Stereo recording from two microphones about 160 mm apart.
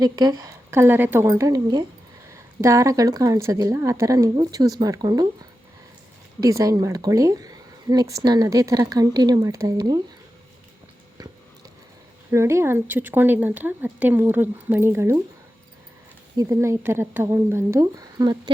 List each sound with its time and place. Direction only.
0.0 s speech: 25° right (ahead or behind)
6.4 s speech: 20° right (ahead or behind)
12.3 s speech: 15° right (ahead or behind)
16.4 s speech: 15° right (ahead or behind)